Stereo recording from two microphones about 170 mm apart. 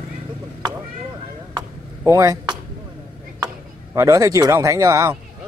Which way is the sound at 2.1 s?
20° right (ahead or behind).